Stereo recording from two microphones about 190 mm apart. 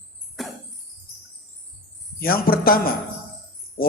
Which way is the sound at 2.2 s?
50° left (ahead or behind).